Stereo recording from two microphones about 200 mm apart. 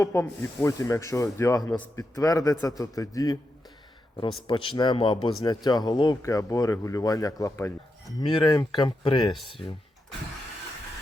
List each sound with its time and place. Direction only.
0.0 s a man's voice: 10° left (ahead or behind)